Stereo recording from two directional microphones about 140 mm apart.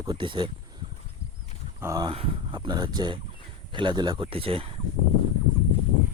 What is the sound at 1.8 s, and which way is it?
Speech, 25° right (ahead or behind).